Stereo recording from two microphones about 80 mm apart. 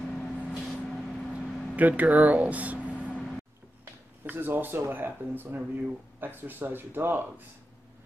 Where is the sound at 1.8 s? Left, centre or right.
Centre.